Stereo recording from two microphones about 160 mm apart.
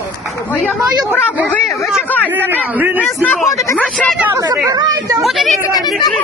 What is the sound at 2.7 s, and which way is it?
Speech, 10° right (ahead or behind).